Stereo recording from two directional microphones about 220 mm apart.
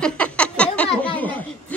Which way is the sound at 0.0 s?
5° left (ahead or behind).